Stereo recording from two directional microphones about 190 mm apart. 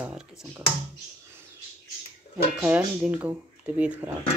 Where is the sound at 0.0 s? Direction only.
5° right (ahead or behind).